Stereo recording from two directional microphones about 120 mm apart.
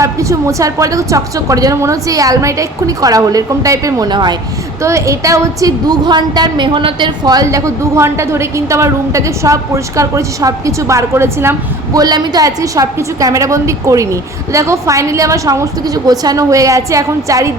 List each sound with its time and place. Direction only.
0.0 s a woman's voice: 25° right (ahead or behind)
4.8 s a woman's voice: 25° right (ahead or behind)
11.9 s a woman's voice: 35° right (ahead or behind)